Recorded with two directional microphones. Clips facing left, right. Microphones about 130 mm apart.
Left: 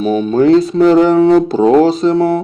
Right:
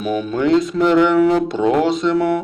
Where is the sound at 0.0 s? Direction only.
30° left (ahead or behind).